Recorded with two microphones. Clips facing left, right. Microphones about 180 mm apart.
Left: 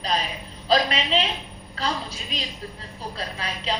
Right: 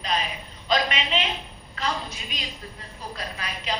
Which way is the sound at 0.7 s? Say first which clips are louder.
Left 3 dB; 35° left (ahead or behind).